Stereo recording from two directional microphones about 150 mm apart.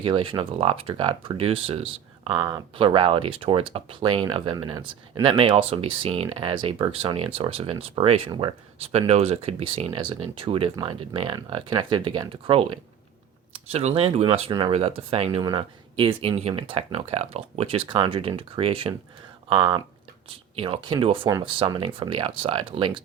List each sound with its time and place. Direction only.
0.0 s speech: 35° right (ahead or behind)